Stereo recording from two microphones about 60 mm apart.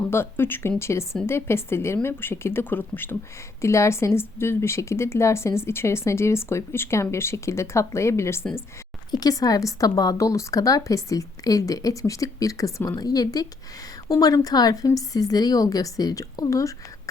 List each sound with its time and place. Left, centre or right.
0.1 s speech: left
0.8 s speech: left
3.6 s speech: left
9.1 s a woman's voice: left
13.0 s a woman's voice: left